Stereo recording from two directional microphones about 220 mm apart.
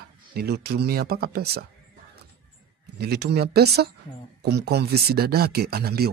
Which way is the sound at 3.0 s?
50° right (ahead or behind).